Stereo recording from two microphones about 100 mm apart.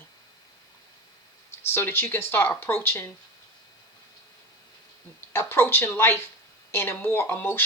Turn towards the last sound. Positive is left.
turn(degrees=20)  # may be behind; listen again after turning